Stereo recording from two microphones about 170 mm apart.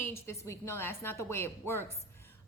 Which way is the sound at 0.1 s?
15° left (ahead or behind).